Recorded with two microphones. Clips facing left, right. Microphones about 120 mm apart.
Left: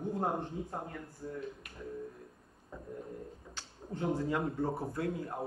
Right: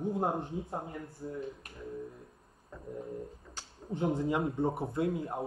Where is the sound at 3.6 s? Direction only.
20° right (ahead or behind).